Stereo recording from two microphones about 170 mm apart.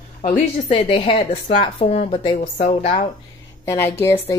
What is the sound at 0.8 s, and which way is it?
Speech, 30° left (ahead or behind).